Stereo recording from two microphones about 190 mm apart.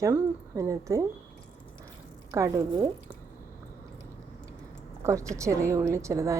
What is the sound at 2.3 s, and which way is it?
Speech, 15° right (ahead or behind).